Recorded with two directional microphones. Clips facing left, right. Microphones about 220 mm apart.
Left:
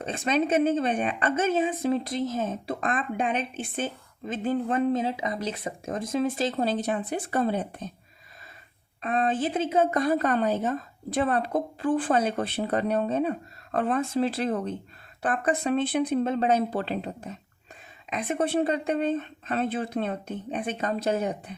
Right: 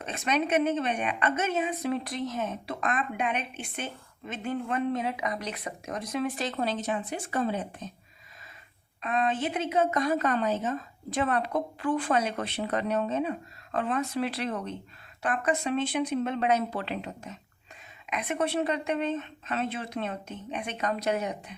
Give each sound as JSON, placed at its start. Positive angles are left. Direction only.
{"t": 0.3, "sound": "a woman's voice", "side_deg": 30}
{"t": 4.4, "sound": "a woman's voice", "side_deg": 35}
{"t": 9.0, "sound": "a woman's voice", "side_deg": 35}
{"t": 15.8, "sound": "speech", "side_deg": 55}
{"t": 16.2, "sound": "a woman's voice", "side_deg": 30}